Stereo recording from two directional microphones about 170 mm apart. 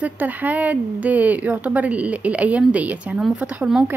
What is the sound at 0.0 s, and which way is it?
Speech, 10° right (ahead or behind).